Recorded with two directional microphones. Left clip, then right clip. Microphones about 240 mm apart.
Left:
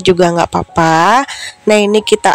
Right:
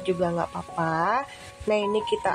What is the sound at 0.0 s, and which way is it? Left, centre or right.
Speech, left.